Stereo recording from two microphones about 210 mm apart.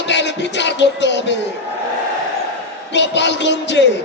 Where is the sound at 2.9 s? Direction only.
55° left (ahead or behind).